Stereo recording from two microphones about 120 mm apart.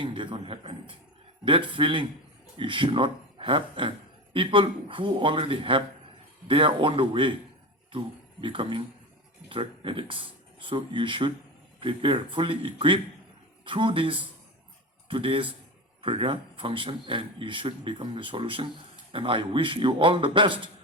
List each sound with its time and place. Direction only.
0.0 s a man's voice: 45° right (ahead or behind)